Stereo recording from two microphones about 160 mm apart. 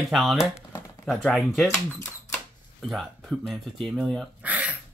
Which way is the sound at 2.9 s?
Centre (ahead or behind).